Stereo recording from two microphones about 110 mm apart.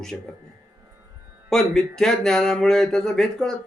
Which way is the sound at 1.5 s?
5° left (ahead or behind).